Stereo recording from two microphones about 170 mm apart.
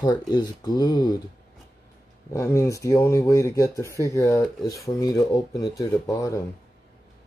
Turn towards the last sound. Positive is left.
turn(degrees=20)  # may be behind; listen again after turning